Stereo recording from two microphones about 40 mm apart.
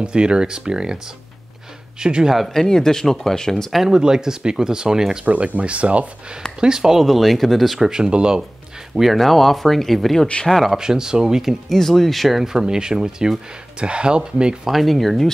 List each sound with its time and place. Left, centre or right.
0.0 s speech: right
2.0 s speech: right
2.4 s speech: centre
3.9 s speech: centre
5.2 s speech: right
6.6 s speech: centre
7.0 s speech: centre
7.9 s speech: right
8.9 s speech: centre
9.2 s speech: centre
10.8 s speech: centre
11.7 s speech: centre
12.5 s speech: centre
14.7 s speech: centre